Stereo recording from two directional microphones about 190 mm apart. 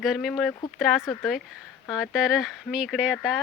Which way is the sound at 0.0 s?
Centre (ahead or behind).